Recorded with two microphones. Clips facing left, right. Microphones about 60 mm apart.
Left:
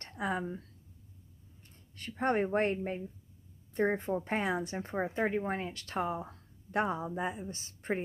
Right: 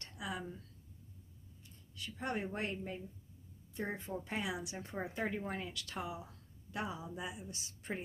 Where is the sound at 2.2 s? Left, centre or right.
Left.